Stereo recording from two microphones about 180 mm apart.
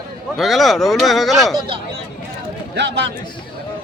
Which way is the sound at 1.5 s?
30° right (ahead or behind).